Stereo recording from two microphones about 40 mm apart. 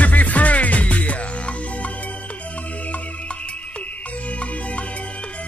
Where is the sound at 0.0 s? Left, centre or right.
Left.